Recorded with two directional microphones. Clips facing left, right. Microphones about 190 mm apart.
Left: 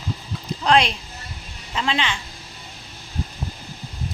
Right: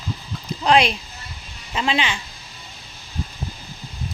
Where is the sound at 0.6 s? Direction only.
5° right (ahead or behind).